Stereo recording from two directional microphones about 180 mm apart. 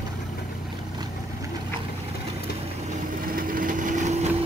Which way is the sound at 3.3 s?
50° right (ahead or behind).